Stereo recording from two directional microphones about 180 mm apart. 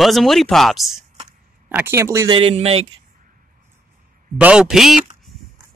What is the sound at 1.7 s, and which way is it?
Speech, 15° right (ahead or behind).